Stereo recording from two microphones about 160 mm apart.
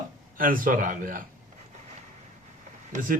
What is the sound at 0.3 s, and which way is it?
Speech, 60° right (ahead or behind).